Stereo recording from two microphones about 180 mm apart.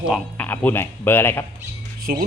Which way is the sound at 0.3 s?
10° left (ahead or behind).